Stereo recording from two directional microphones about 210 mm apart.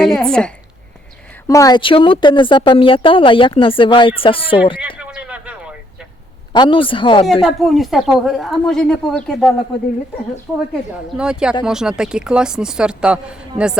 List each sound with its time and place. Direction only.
0.0 s speech: centre (ahead or behind)
1.5 s a woman's voice: 15° left (ahead or behind)
4.9 s a sound: 5° right (ahead or behind)
6.5 s a woman's voice: 20° left (ahead or behind)
7.4 s speech: centre (ahead or behind)
10.9 s speech: 5° right (ahead or behind)